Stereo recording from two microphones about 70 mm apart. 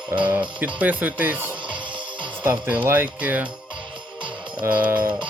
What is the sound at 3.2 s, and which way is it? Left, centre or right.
Speech, right.